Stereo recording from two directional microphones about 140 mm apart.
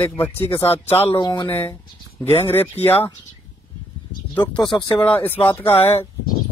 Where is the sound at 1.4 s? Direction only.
15° left (ahead or behind).